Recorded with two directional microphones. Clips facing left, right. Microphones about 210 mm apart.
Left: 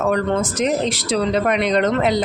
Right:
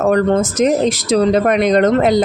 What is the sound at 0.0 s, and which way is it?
Speech, 45° right (ahead or behind).